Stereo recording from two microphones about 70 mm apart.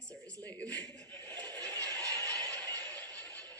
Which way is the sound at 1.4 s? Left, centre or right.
Right.